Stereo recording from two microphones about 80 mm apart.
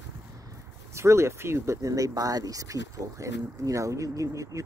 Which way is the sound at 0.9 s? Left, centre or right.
Right.